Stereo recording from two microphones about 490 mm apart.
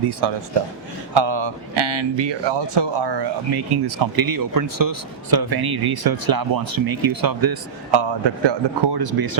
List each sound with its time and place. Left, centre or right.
0.1 s speech: right